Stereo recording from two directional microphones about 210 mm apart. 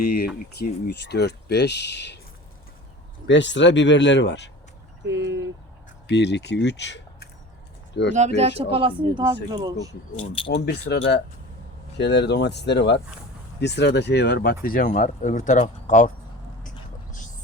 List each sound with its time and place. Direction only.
0.0 s speech: 45° left (ahead or behind)
3.2 s speech: 60° left (ahead or behind)
5.0 s speech: 55° right (ahead or behind)
6.1 s speech: 55° left (ahead or behind)
8.4 s speech: 30° right (ahead or behind)
10.2 s speech: 25° left (ahead or behind)
10.5 s speech: 50° left (ahead or behind); by 16.0 s 35° left (ahead or behind)
16.6 s vehicle: 40° left (ahead or behind)